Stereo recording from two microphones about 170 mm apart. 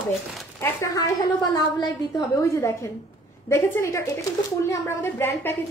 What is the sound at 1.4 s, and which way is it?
A woman's voice, 25° left (ahead or behind).